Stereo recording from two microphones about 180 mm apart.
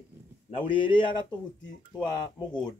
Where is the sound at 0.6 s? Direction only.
25° left (ahead or behind).